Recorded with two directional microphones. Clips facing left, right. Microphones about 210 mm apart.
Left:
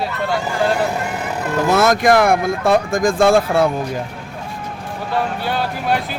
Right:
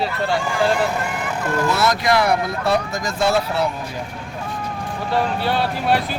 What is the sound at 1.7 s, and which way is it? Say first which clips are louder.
Speech: left 7 dB; 50° left (ahead or behind).